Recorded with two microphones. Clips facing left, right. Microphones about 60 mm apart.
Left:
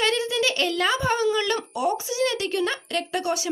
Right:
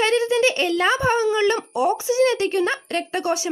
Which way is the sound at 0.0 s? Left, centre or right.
Right.